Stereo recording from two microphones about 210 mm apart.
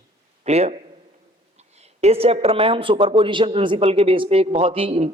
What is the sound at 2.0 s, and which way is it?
Speech, 30° right (ahead or behind).